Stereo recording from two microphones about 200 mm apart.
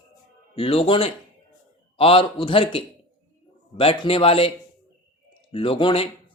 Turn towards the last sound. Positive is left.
turn(degrees=25)  # may be behind; listen again after turning